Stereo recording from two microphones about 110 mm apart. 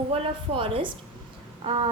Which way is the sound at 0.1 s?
60° right (ahead or behind).